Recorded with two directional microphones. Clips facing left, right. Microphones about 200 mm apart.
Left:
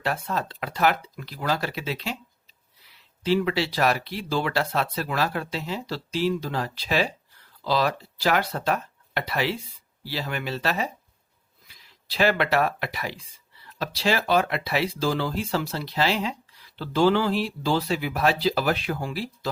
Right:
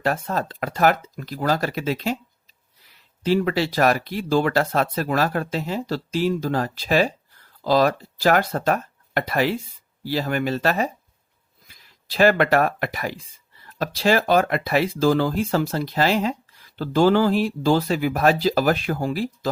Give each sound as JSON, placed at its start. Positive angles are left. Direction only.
{"t": 0.0, "sound": "speech", "side_deg": -45}